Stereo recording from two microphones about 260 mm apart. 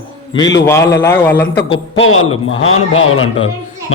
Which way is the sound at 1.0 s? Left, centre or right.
Centre.